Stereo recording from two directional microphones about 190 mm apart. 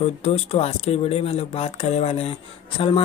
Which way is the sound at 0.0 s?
35° left (ahead or behind).